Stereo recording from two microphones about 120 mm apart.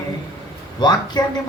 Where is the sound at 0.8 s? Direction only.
35° left (ahead or behind).